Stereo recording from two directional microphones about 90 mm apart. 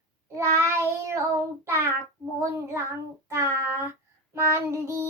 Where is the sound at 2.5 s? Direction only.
30° right (ahead or behind).